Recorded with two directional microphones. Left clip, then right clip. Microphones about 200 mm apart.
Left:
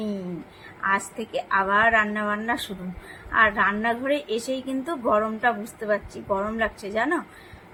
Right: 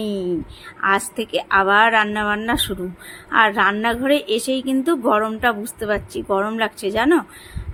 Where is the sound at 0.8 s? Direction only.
50° right (ahead or behind).